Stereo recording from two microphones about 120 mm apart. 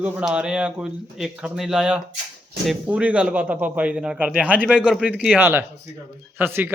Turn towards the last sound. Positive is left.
turn(degrees=-15)  # may be behind; listen again after turning